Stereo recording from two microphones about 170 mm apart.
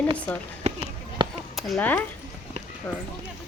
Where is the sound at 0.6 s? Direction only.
40° right (ahead or behind).